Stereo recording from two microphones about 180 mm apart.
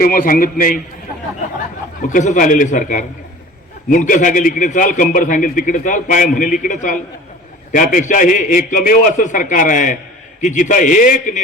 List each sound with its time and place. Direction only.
0.0 s a man's voice: 50° left (ahead or behind)
2.0 s a man's voice: 45° left (ahead or behind)